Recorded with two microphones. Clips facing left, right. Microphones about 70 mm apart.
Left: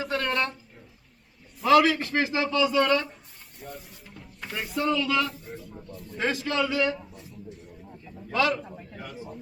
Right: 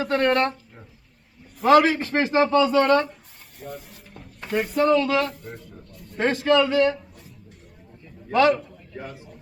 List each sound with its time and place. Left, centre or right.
0.0 s speech: right
1.6 s a man's voice: right
3.6 s speech: centre
4.4 s a man's voice: right
5.3 s speech: centre
5.9 s a sound: centre
6.1 s a man's voice: right
8.3 s a man's voice: right
8.7 s a sound: left